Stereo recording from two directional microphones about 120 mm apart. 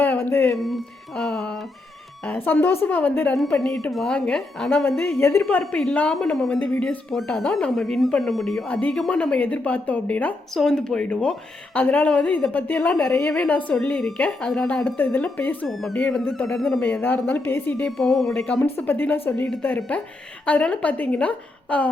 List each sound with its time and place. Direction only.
0.0 s a sound: 20° left (ahead or behind)
0.5 s a woman's voice: centre (ahead or behind)
4.9 s speech: 15° left (ahead or behind)
15.6 s a woman's voice: centre (ahead or behind)
16.8 s speech: 15° left (ahead or behind)
17.9 s a woman's voice: centre (ahead or behind)
18.4 s speech: 10° left (ahead or behind)